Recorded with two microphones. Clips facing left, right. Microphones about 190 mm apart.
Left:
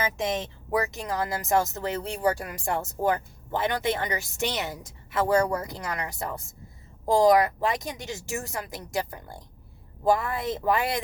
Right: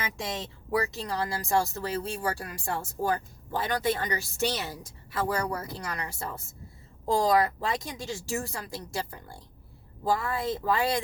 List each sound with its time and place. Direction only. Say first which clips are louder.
0.2 s speech: left 6 dB; 20° left (ahead or behind)